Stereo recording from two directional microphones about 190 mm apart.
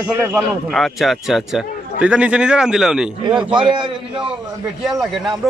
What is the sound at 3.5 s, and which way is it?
Speech, 25° right (ahead or behind).